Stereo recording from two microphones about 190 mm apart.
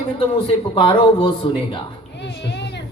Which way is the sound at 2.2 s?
65° left (ahead or behind).